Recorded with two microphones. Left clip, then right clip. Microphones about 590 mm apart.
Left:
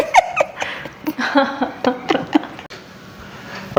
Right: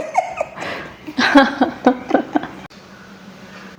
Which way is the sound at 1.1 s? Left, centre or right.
Right.